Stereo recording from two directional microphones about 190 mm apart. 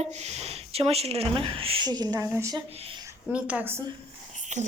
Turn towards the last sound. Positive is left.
turn(degrees=-40)  # may be behind; listen again after turning